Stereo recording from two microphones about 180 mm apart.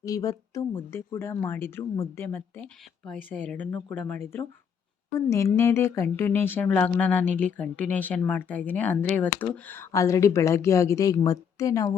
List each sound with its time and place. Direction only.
0.0 s speech: 20° left (ahead or behind)